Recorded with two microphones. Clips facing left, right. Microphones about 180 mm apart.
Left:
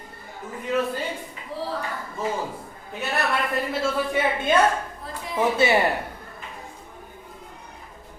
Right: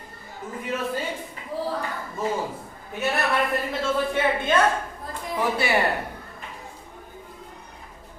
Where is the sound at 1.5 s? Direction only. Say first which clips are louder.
Right 2 dB; 45° right (ahead or behind).